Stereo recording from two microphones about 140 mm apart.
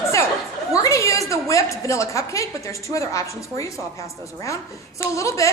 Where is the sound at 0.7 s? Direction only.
20° left (ahead or behind).